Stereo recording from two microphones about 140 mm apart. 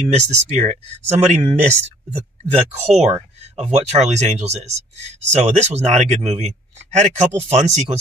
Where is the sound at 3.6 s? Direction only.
50° right (ahead or behind).